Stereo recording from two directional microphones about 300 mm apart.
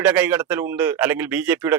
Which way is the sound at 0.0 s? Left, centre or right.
Centre.